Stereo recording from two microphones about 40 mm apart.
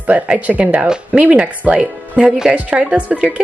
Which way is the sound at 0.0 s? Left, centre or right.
Right.